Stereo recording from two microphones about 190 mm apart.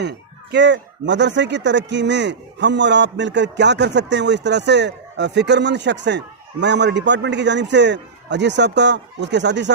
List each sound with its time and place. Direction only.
0.0 s speech: 65° right (ahead or behind)